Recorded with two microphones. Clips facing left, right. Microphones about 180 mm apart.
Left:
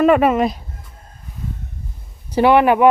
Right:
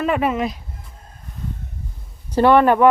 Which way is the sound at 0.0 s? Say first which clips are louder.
Left 7 dB; 55° left (ahead or behind).